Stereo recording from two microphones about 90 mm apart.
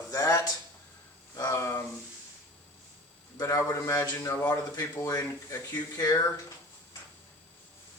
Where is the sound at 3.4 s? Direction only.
40° left (ahead or behind).